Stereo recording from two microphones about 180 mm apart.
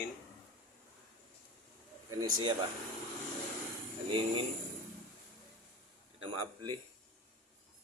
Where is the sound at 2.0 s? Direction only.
25° right (ahead or behind).